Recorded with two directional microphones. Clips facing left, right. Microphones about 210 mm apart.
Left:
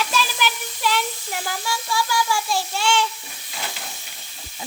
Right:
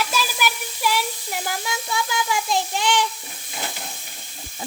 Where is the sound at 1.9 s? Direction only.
20° right (ahead or behind).